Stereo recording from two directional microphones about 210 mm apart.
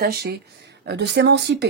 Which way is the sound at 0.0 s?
45° right (ahead or behind).